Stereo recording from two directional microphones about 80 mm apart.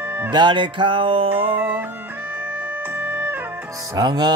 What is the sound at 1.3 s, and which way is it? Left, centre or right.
Music, right.